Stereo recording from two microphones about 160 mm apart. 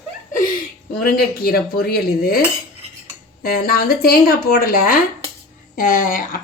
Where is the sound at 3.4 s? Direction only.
70° left (ahead or behind).